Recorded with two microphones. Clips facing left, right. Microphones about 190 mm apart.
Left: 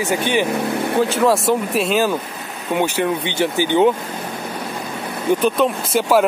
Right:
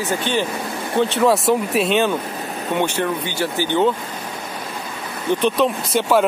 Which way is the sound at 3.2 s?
20° left (ahead or behind).